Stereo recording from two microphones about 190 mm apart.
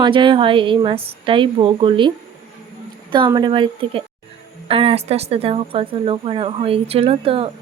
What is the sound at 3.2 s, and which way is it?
A woman's voice, 20° right (ahead or behind).